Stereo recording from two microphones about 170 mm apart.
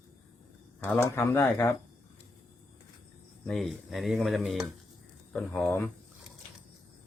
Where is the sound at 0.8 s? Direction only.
15° left (ahead or behind).